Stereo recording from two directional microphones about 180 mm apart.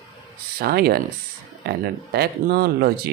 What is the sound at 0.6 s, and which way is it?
Speech, 60° right (ahead or behind).